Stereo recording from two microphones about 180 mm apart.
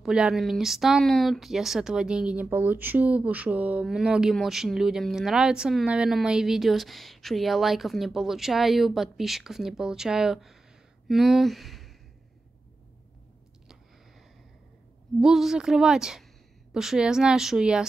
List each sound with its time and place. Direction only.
0.0 s speech: 5° right (ahead or behind)
15.1 s speech: centre (ahead or behind)